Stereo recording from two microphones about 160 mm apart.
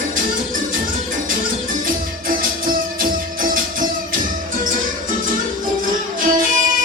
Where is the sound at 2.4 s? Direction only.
60° right (ahead or behind).